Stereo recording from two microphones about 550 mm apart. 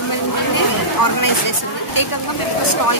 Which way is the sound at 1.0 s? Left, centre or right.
Left.